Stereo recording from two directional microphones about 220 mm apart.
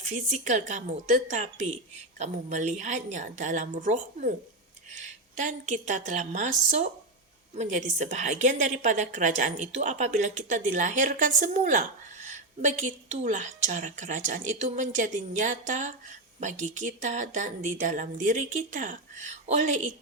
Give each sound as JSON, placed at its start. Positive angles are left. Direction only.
{"t": 0.0, "sound": "a woman's voice", "side_deg": -35}
{"t": 5.4, "sound": "a woman's voice", "side_deg": -35}